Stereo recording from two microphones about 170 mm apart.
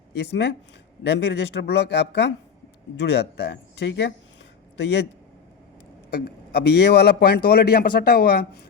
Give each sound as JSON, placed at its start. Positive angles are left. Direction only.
{"t": 0.1, "sound": "speech", "side_deg": 80}
{"t": 6.1, "sound": "a man's voice", "side_deg": 65}